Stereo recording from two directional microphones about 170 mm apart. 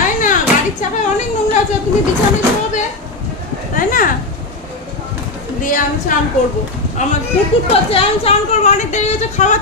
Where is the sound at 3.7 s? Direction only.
55° left (ahead or behind).